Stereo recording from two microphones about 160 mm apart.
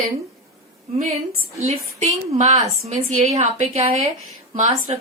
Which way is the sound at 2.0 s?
45° right (ahead or behind).